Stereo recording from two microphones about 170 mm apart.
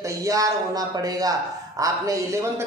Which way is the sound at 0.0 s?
20° right (ahead or behind).